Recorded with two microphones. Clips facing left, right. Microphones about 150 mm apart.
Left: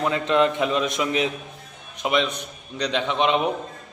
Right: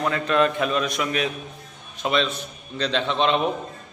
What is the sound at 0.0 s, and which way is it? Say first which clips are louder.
A man's voice: left 1 dB; 20° left (ahead or behind).